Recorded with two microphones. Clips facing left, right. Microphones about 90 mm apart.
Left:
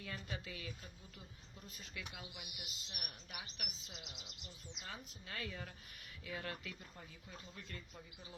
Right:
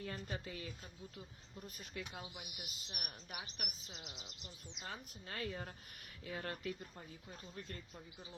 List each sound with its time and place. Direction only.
0.0 s speech: 35° right (ahead or behind); by 4.2 s 50° right (ahead or behind)
4.8 s speech: 35° right (ahead or behind)